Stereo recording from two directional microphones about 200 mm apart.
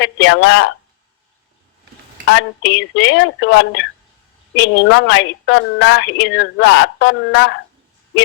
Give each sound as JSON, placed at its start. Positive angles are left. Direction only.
{"t": 0.0, "sound": "a woman's voice", "side_deg": 70}
{"t": 2.2, "sound": "a woman's voice", "side_deg": 70}